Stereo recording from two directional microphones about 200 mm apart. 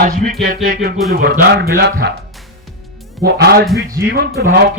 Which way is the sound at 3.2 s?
55° right (ahead or behind).